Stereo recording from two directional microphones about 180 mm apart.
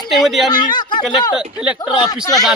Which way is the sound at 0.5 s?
25° left (ahead or behind).